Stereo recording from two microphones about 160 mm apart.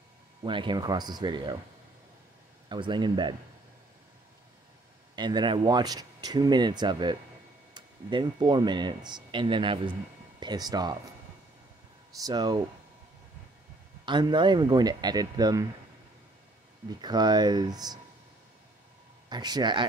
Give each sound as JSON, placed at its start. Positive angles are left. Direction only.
{"t": 0.4, "sound": "speech", "side_deg": -30}
{"t": 2.7, "sound": "speech", "side_deg": -30}
{"t": 5.1, "sound": "speech", "side_deg": -25}
{"t": 12.2, "sound": "speech", "side_deg": -25}
{"t": 14.0, "sound": "speech", "side_deg": -30}
{"t": 17.0, "sound": "speech", "side_deg": -25}
{"t": 19.2, "sound": "speech", "side_deg": -25}